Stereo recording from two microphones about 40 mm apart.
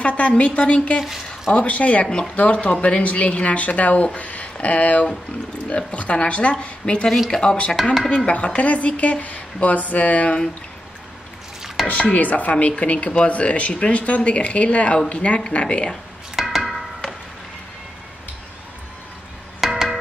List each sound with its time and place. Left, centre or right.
0.0 s a woman's voice: left
1.0 s speech: centre
1.5 s speech: left
2.0 s speech: centre
2.3 s a woman's voice: left
11.9 s a woman's voice: left
16.3 s a sound: centre
19.6 s music: centre